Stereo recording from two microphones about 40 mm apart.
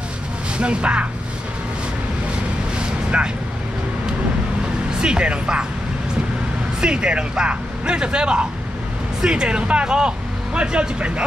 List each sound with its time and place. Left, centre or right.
0.6 s speech: right
3.1 s speech: right
5.0 s speech: right
6.8 s speech: right